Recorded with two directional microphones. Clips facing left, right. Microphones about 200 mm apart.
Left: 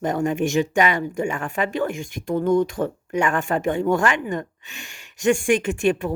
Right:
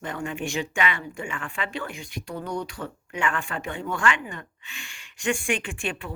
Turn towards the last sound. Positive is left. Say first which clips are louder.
# left 12 dB
turn(degrees=45)  # may be behind; listen again after turning